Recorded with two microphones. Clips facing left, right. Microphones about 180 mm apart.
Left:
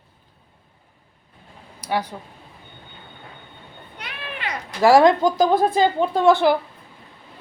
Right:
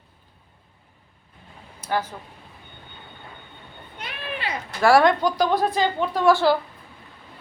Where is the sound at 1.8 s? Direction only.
15° left (ahead or behind).